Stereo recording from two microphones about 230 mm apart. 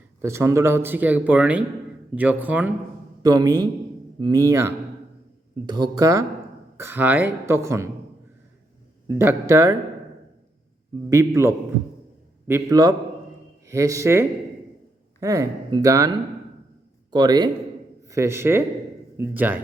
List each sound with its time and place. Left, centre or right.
0.2 s speech: centre
9.0 s speech: centre
11.1 s a man's voice: centre